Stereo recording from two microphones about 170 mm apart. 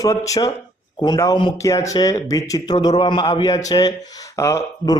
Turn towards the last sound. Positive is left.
turn(degrees=20)  # may be behind; listen again after turning